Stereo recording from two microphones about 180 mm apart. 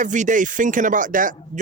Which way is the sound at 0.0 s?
45° right (ahead or behind).